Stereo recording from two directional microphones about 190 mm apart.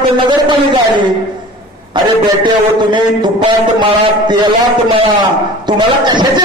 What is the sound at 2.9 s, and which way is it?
A man's voice, 25° right (ahead or behind).